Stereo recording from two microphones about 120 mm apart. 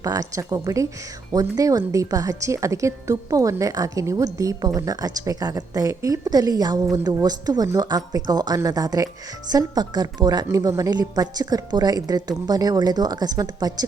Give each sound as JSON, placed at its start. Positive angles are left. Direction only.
{"t": 0.0, "sound": "a woman's voice", "side_deg": -30}